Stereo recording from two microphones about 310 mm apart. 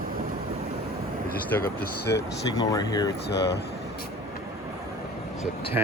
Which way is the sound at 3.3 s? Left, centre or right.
Left.